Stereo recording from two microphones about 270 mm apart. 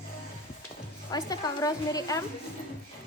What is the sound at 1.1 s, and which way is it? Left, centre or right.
A woman's voice, centre.